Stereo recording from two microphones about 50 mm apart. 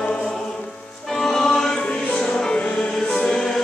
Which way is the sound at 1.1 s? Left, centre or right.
Centre.